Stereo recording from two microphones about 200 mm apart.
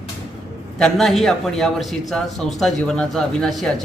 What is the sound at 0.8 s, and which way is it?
A man's voice, centre (ahead or behind).